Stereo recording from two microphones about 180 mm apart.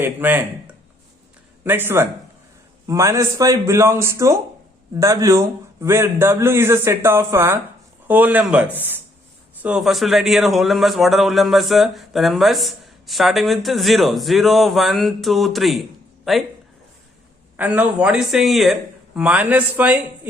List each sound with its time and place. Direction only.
0.0 s a man's voice: 10° right (ahead or behind)
1.6 s a man's voice: 10° right (ahead or behind)
17.6 s a man's voice: 10° right (ahead or behind)